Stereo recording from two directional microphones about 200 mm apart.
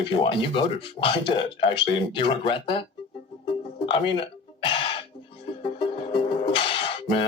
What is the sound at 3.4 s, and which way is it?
Music, 25° left (ahead or behind).